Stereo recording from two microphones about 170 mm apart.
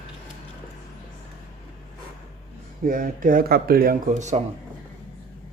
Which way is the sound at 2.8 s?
55° right (ahead or behind).